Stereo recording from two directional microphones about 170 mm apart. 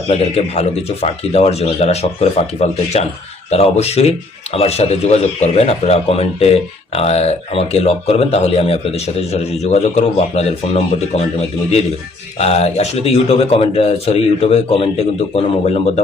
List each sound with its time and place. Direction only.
0.1 s speech: 35° left (ahead or behind)
3.5 s speech: 40° left (ahead or behind)